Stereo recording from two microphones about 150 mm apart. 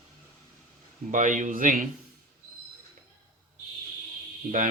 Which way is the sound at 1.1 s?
55° right (ahead or behind).